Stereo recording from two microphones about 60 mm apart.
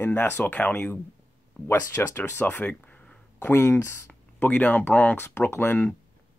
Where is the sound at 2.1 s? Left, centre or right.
Left.